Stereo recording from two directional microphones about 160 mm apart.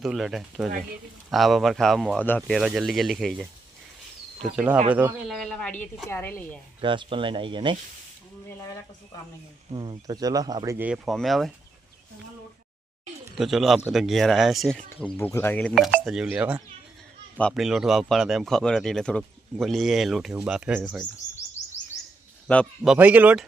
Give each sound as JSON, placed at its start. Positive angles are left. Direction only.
{"t": 0.0, "sound": "speech", "side_deg": 0}
{"t": 2.2, "sound": "a woman's voice", "side_deg": 10}
{"t": 2.6, "sound": "speech", "side_deg": 0}
{"t": 4.5, "sound": "speech", "side_deg": -10}
{"t": 6.1, "sound": "a woman's voice", "side_deg": 15}
{"t": 6.8, "sound": "speech", "side_deg": -30}
{"t": 8.4, "sound": "speech", "side_deg": 20}
{"t": 9.7, "sound": "speech", "side_deg": -25}
{"t": 10.8, "sound": "speech", "side_deg": -5}
{"t": 13.3, "sound": "a woman's voice", "side_deg": 0}
{"t": 15.7, "sound": "speech", "side_deg": 0}
{"t": 22.8, "sound": "speech", "side_deg": -5}